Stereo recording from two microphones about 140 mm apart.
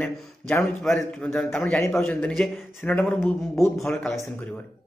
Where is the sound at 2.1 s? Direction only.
5° left (ahead or behind).